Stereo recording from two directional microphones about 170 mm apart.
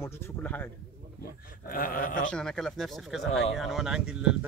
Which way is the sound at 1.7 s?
55° left (ahead or behind).